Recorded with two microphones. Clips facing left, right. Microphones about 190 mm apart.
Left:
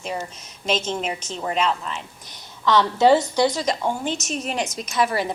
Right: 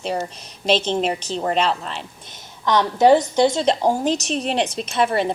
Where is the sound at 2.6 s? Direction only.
20° right (ahead or behind).